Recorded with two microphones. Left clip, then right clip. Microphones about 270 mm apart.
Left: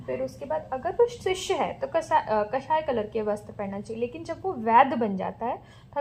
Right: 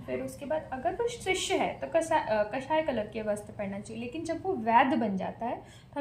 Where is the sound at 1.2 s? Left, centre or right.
Centre.